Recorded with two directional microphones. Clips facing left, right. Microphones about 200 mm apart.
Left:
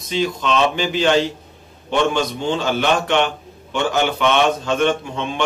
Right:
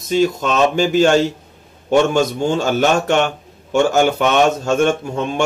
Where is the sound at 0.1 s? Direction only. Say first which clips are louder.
Right 4 dB; 45° right (ahead or behind).